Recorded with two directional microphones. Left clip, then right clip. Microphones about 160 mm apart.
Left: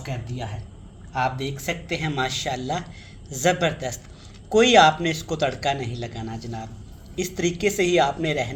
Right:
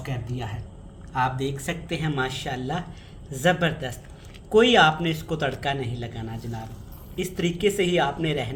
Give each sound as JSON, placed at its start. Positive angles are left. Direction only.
{"t": 1.1, "sound": "speech", "side_deg": 40}